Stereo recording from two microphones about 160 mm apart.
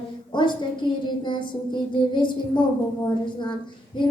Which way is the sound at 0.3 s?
30° left (ahead or behind).